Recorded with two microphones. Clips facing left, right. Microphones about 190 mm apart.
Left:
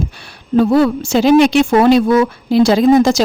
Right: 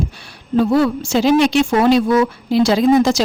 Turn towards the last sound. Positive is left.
turn(degrees=45)  # may be behind; listen again after turning